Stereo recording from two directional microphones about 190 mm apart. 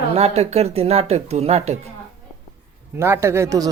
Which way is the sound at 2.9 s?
10° right (ahead or behind).